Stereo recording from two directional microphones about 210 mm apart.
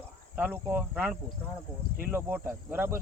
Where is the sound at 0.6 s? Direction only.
10° right (ahead or behind).